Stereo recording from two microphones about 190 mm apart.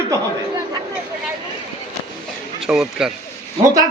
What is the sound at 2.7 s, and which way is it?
Speech, centre (ahead or behind).